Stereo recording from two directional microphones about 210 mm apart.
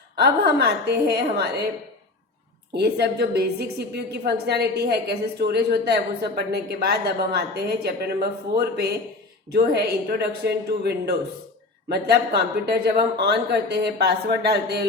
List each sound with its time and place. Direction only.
0.2 s a woman's voice: 50° right (ahead or behind)
2.7 s a woman's voice: 50° right (ahead or behind)